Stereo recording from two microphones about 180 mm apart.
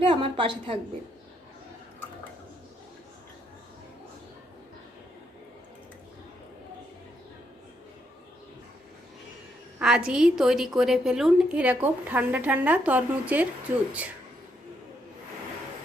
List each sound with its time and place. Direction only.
0.1 s a woman's voice: 30° right (ahead or behind)
9.7 s a woman's voice: 5° right (ahead or behind)